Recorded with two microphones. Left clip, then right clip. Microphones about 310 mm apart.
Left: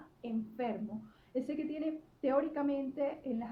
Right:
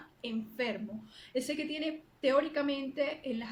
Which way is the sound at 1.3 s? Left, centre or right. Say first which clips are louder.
Right 3 dB; right.